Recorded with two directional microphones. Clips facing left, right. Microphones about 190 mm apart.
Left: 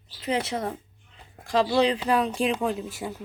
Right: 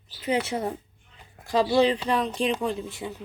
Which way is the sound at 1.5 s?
Centre (ahead or behind).